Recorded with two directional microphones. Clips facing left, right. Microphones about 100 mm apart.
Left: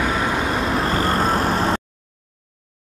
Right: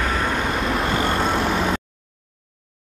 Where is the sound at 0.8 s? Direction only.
35° left (ahead or behind).